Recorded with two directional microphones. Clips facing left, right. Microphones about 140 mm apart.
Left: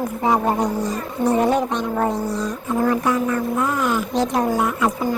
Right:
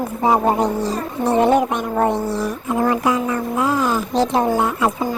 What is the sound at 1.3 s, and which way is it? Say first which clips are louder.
Music: right 3 dB; 25° right (ahead or behind).